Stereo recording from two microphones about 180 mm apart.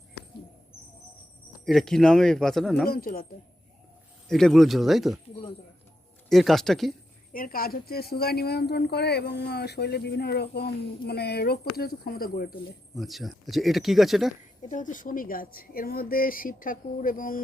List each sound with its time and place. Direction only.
1.6 s speech: centre (ahead or behind)
2.8 s speech: 55° left (ahead or behind)
4.3 s speech: centre (ahead or behind)
6.2 s speech: centre (ahead or behind)
7.3 s a woman's voice: 55° left (ahead or behind)
13.0 s speech: centre (ahead or behind)
14.6 s speech: 45° left (ahead or behind)